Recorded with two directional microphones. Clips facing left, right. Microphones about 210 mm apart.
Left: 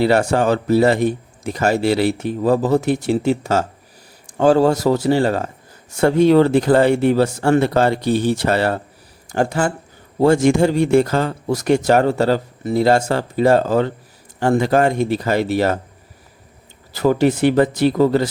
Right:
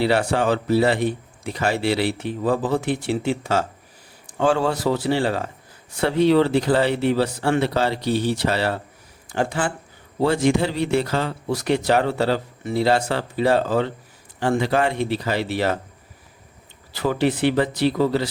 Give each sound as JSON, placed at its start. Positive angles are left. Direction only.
{"t": 0.0, "sound": "speech", "side_deg": 45}
{"t": 16.9, "sound": "speech", "side_deg": 45}